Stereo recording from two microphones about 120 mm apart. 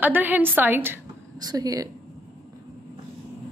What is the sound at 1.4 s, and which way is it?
Speech, 30° right (ahead or behind).